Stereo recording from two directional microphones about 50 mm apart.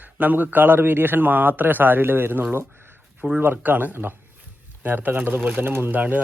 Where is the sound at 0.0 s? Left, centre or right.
Right.